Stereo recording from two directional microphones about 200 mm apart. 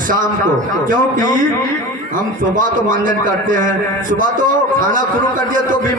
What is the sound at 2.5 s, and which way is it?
A man's voice, 40° right (ahead or behind).